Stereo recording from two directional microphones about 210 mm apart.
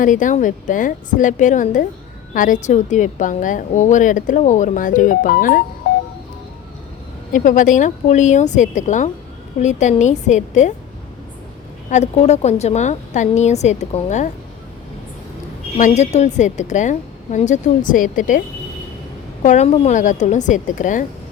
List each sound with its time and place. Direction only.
0.0 s a woman's voice: 40° left (ahead or behind)
7.3 s a woman's voice: 40° left (ahead or behind)
11.9 s a woman's voice: 30° left (ahead or behind)
15.8 s a woman's voice: 30° left (ahead or behind)